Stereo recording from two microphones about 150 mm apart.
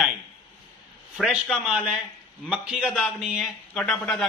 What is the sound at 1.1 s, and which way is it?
A man's voice, 5° right (ahead or behind).